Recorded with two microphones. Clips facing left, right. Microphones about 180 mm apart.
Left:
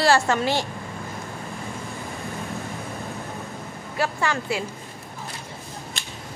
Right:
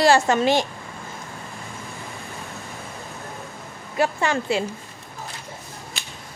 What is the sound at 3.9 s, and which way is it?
Speech, 20° right (ahead or behind).